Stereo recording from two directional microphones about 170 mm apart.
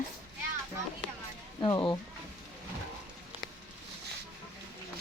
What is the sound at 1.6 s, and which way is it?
Speech, 25° left (ahead or behind).